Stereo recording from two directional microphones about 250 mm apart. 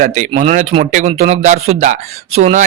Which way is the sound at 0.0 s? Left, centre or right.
Right.